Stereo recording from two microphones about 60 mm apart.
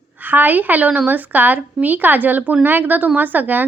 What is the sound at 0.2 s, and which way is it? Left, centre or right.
Speech, right.